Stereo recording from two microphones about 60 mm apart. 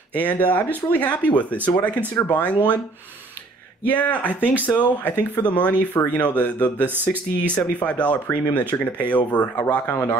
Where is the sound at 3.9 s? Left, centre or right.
Left.